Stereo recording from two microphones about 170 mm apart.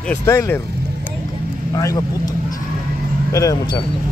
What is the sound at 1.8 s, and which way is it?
Speech, 20° left (ahead or behind).